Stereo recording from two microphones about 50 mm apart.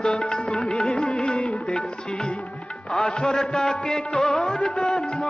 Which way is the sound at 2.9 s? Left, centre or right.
Centre.